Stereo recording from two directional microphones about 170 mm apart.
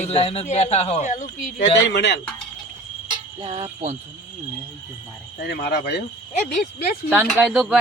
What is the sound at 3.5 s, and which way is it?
Cricket, 35° right (ahead or behind).